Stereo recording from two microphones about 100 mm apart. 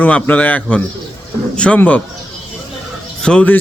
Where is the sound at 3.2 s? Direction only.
10° left (ahead or behind).